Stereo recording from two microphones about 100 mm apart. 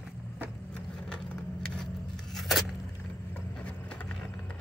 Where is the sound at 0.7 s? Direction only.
10° left (ahead or behind).